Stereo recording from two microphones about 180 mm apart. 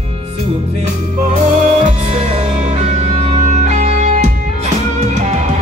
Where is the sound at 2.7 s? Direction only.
35° right (ahead or behind).